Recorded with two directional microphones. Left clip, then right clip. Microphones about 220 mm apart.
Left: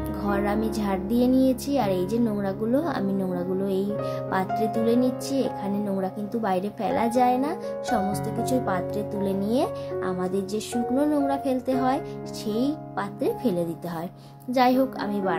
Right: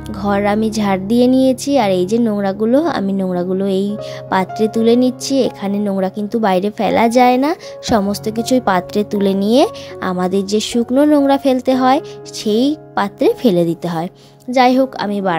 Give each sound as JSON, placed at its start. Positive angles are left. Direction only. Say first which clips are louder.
{"t": 0.2, "sound": "a woman's voice", "louder": "right 11 dB", "side_deg": -35}